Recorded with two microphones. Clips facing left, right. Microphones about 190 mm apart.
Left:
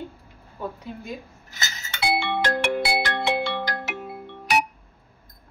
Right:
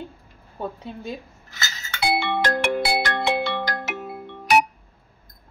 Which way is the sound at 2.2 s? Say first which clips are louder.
Right 1 dB; 45° right (ahead or behind).